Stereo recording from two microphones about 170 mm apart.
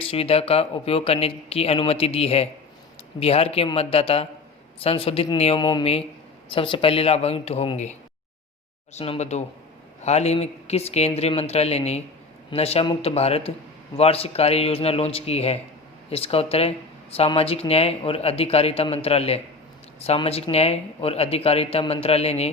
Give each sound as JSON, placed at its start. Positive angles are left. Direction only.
{"t": 0.0, "sound": "speech", "side_deg": 35}
{"t": 5.5, "sound": "speech", "side_deg": 25}
{"t": 9.0, "sound": "speech", "side_deg": 40}